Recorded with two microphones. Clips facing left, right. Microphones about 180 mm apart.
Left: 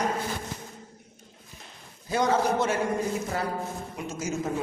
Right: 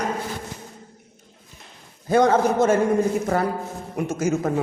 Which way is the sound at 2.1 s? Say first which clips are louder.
Right 7 dB; 55° right (ahead or behind).